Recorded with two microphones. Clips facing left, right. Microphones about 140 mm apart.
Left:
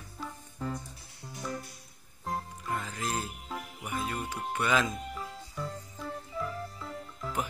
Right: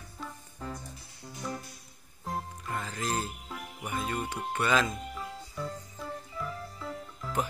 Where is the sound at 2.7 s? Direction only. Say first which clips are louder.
Right 1 dB; 10° left (ahead or behind).